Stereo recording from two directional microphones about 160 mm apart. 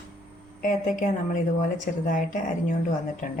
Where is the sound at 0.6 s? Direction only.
55° left (ahead or behind).